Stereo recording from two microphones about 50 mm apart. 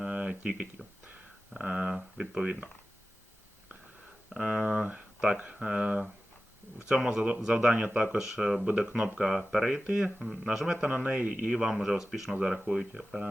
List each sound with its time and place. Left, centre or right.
0.0 s a sound: right
1.5 s speech: right
4.3 s speech: centre
8.2 s speech: centre
10.7 s speech: right
11.4 s speech: centre